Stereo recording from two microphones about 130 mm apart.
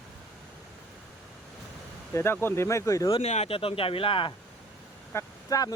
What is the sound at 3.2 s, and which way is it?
Speech, 55° left (ahead or behind).